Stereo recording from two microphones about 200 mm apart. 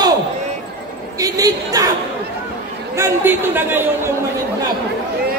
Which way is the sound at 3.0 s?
10° right (ahead or behind).